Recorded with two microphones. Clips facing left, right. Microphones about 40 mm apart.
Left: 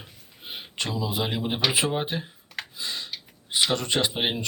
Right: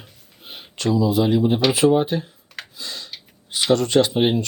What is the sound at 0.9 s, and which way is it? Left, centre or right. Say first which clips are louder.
Speech: right 12 dB; left.